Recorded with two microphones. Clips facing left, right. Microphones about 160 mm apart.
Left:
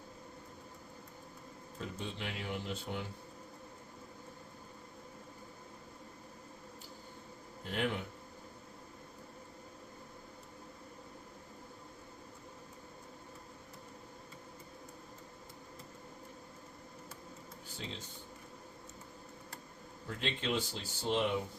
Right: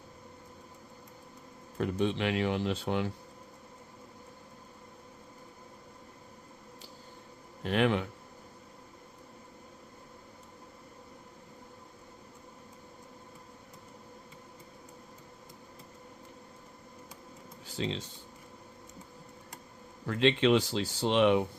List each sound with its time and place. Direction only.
1.8 s speech: 75° right (ahead or behind); by 3.1 s 90° right
7.6 s speech: 90° right
17.7 s speech: 90° right
20.1 s speech: 90° right